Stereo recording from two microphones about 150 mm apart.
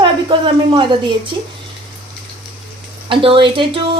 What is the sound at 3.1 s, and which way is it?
Speech, 35° right (ahead or behind).